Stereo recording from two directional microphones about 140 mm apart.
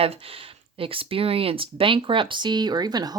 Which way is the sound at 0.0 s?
45° right (ahead or behind).